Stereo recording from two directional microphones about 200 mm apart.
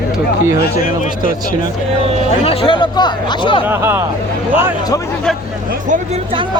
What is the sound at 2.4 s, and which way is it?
Speech, 30° left (ahead or behind).